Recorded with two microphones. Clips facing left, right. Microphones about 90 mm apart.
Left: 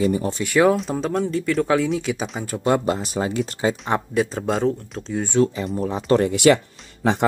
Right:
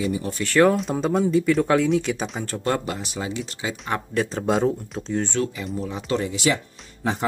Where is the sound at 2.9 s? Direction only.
40° left (ahead or behind).